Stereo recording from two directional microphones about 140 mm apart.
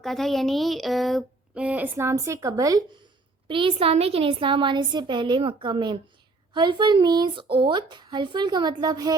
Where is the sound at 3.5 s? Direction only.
40° right (ahead or behind).